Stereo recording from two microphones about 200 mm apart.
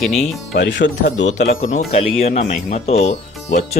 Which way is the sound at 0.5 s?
60° left (ahead or behind).